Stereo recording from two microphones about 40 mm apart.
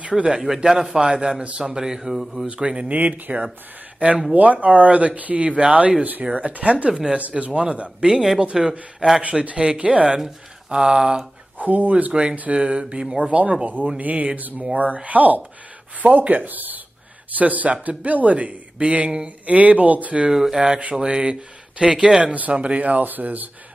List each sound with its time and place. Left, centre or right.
0.3 s speech: centre
1.4 s speech: right
1.7 s speech: centre
2.4 s speech: right
2.9 s speech: right
6.9 s speech: centre
7.5 s speech: right
8.5 s speech: centre
9.0 s speech: right
10.0 s speech: centre
11.5 s speech: right
12.1 s speech: right
13.2 s speech: right
20.2 s speech: centre; by 23.5 s right